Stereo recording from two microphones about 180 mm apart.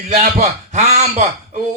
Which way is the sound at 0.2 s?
40° right (ahead or behind).